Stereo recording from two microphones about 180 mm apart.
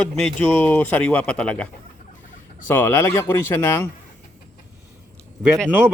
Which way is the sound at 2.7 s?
15° left (ahead or behind).